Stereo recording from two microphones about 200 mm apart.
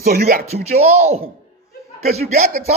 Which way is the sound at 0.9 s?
35° right (ahead or behind).